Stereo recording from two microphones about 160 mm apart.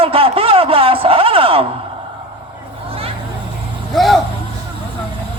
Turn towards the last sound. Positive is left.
turn(degrees=0)  # may be behind; listen again after turning